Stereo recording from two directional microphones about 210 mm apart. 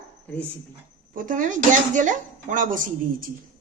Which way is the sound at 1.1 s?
40° right (ahead or behind).